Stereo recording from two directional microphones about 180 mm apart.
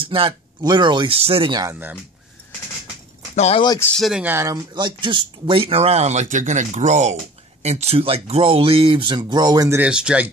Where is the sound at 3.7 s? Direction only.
15° left (ahead or behind).